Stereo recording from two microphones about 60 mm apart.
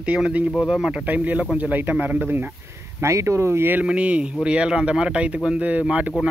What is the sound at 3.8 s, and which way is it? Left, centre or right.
Speech, centre.